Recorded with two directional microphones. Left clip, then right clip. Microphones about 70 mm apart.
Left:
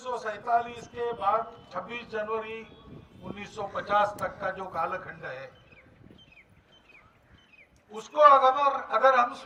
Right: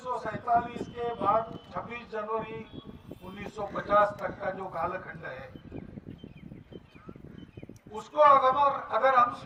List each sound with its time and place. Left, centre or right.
0.0 s a sound: left
0.9 s a man's voice: left
7.9 s a man's voice: left